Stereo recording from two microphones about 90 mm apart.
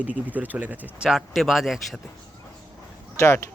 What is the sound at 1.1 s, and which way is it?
Speech, centre (ahead or behind).